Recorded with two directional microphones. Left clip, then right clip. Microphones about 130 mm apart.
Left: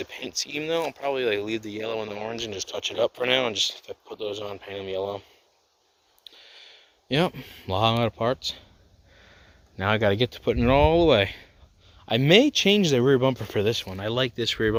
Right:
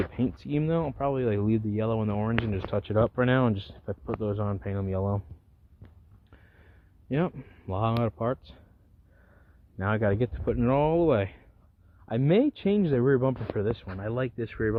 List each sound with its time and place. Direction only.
0.3 s speech: 10° left (ahead or behind)
1.0 s speech: 25° left (ahead or behind)
3.4 s speech: 15° left (ahead or behind)
4.7 s speech: 30° left (ahead or behind)
7.1 s speech: 30° left (ahead or behind)
9.7 s speech: 20° left (ahead or behind)